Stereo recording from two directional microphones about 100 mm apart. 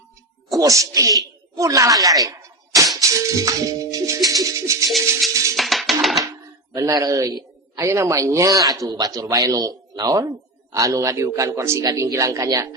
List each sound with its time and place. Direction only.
0.5 s speech: 35° right (ahead or behind)
1.5 s music: 35° right (ahead or behind)
5.5 s music: centre (ahead or behind)
6.7 s speech: 35° right (ahead or behind)